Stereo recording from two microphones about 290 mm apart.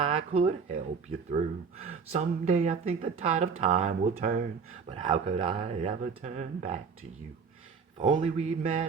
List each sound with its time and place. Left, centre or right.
0.0 s speech: centre
8.0 s speech: right